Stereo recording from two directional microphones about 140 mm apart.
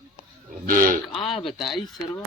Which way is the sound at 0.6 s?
80° right.